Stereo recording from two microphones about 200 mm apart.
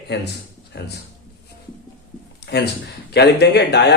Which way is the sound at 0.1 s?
55° left (ahead or behind).